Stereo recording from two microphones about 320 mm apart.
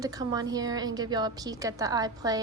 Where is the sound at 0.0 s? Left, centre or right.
Centre.